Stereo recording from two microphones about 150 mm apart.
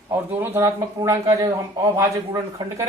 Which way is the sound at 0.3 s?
15° right (ahead or behind).